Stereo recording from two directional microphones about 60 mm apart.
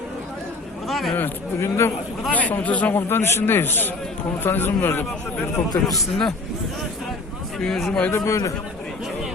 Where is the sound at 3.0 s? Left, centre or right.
Left.